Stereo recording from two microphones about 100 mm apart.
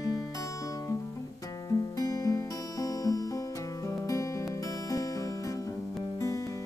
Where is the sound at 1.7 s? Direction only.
40° left (ahead or behind).